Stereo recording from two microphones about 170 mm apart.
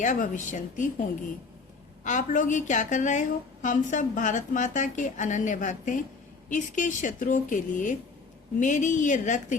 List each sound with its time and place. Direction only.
0.0 s a woman's voice: 45° left (ahead or behind)
2.0 s a woman's voice: 50° left (ahead or behind)